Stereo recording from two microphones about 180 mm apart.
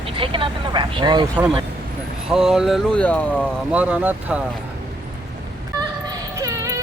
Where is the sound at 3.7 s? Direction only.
5° right (ahead or behind).